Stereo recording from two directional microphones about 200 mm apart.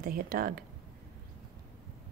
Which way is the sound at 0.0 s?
45° right (ahead or behind).